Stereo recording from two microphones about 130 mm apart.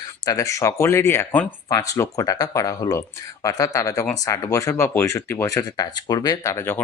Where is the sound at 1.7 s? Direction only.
25° left (ahead or behind).